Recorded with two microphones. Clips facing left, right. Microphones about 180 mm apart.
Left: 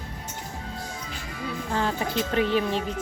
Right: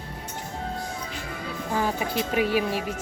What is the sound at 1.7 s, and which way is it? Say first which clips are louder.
Speech: right 1 dB; 10° right (ahead or behind).